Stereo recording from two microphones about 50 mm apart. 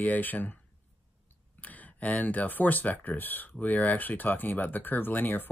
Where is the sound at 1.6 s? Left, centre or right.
Left.